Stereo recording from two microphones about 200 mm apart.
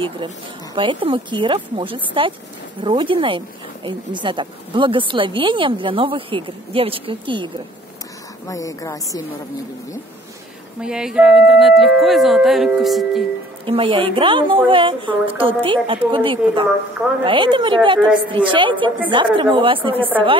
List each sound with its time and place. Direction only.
0.7 s a woman's voice: 25° right (ahead or behind)
8.5 s speech: 15° left (ahead or behind)
10.8 s speech: 5° right (ahead or behind)
13.7 s a woman's voice: 25° right (ahead or behind)